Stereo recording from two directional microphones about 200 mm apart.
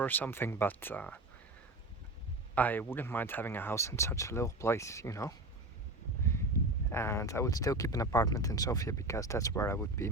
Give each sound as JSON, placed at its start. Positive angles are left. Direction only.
{"t": 0.0, "sound": "speech", "side_deg": 10}
{"t": 2.6, "sound": "speech", "side_deg": 10}
{"t": 6.9, "sound": "speech", "side_deg": 15}